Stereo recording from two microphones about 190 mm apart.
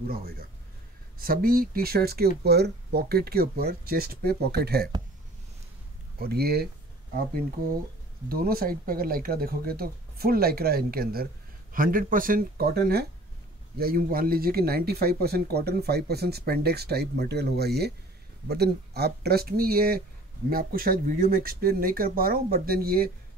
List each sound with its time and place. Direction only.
0.1 s speech: 50° right (ahead or behind)
6.1 s speech: 55° right (ahead or behind)
8.3 s speech: 50° right (ahead or behind)